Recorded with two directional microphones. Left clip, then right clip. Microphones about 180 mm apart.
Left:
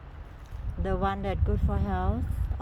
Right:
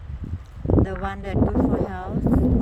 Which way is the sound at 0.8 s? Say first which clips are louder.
Even; 5° left (ahead or behind).